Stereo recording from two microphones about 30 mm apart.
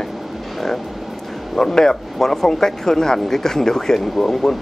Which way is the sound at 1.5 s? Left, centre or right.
Centre.